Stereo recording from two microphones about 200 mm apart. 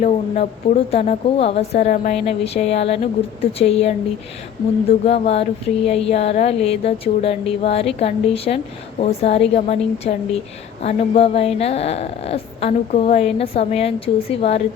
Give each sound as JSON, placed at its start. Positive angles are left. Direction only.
{"t": 0.0, "sound": "speech", "side_deg": 40}
{"t": 5.0, "sound": "speech", "side_deg": 30}